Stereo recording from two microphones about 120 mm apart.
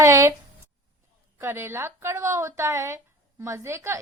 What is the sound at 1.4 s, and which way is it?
A woman's voice, 20° right (ahead or behind).